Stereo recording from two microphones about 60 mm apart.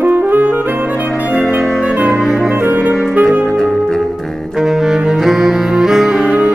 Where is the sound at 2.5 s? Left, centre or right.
Right.